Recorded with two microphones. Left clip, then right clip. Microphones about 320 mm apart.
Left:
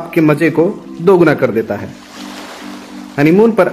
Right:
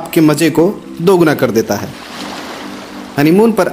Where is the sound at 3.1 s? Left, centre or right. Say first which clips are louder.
Left 1 dB; centre.